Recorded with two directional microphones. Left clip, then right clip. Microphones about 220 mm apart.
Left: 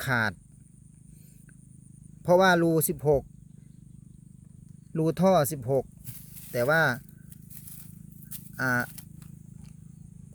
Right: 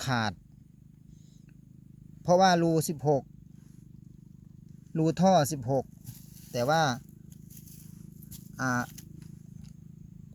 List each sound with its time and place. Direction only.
0.0 s speech: 15° left (ahead or behind)
2.2 s speech: 20° left (ahead or behind)
4.9 s speech: 15° left (ahead or behind)
8.7 s speech: 40° left (ahead or behind)